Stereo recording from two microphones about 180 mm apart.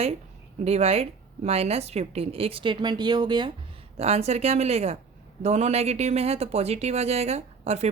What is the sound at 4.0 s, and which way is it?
A woman's voice, 35° right (ahead or behind).